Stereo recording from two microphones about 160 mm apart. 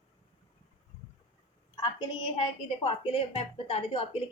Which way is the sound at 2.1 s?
30° left (ahead or behind).